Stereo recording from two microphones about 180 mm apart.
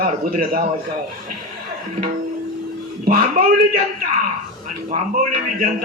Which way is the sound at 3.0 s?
55° right (ahead or behind).